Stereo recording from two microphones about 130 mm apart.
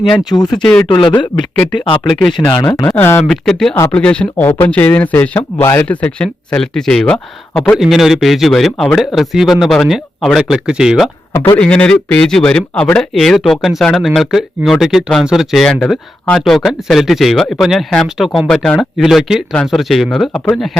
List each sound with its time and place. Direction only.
0.3 s speech: 30° left (ahead or behind)
0.5 s speech: 5° left (ahead or behind)
0.9 s speech: 35° left (ahead or behind)
2.4 s speech: 25° left (ahead or behind)
3.2 s speech: 5° left (ahead or behind)
7.8 s speech: centre (ahead or behind)
11.5 s speech: 10° left (ahead or behind)